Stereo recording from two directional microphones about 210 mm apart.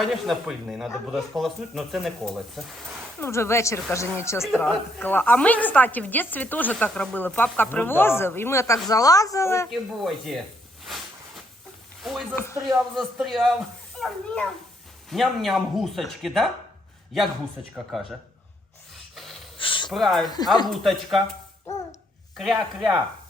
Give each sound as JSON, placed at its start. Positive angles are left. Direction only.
{"t": 0.0, "sound": "speech", "side_deg": 0}
{"t": 3.2, "sound": "a woman's voice", "side_deg": 10}
{"t": 4.4, "sound": "a woman's voice", "side_deg": 0}
{"t": 9.6, "sound": "speech", "side_deg": 0}
{"t": 10.8, "sound": "a sound", "side_deg": 0}
{"t": 12.0, "sound": "speech", "side_deg": 0}
{"t": 17.9, "sound": "speech", "side_deg": 0}
{"t": 19.1, "sound": "snort", "side_deg": 0}
{"t": 19.5, "sound": "a sound", "side_deg": 25}
{"t": 19.9, "sound": "speech", "side_deg": 0}
{"t": 22.4, "sound": "speech", "side_deg": 0}